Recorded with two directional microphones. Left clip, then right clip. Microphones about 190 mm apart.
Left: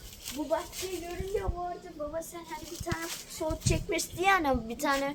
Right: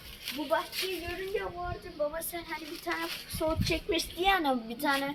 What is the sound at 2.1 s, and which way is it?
Speech, 30° right (ahead or behind).